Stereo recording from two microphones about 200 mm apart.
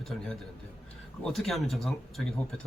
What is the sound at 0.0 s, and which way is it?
A man's voice, centre (ahead or behind).